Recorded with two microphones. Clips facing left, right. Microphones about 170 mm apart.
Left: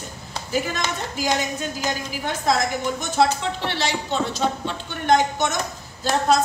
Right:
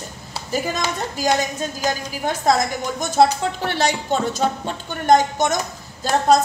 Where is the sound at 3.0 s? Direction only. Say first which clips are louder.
Right 5 dB; 45° right (ahead or behind).